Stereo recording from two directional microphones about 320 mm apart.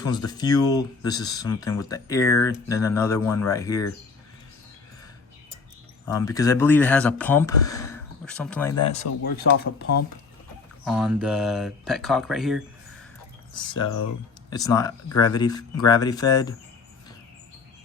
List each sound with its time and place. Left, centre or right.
0.0 s speech: centre
6.1 s speech: centre
8.9 s speech: left
10.8 s speech: centre
13.6 s speech: centre